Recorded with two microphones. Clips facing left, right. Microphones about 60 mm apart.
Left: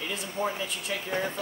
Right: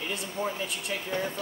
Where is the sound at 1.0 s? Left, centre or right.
Centre.